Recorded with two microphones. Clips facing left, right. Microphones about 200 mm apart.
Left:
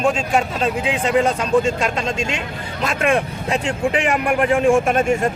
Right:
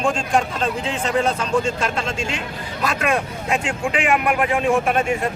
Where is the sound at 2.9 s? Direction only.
30° left (ahead or behind).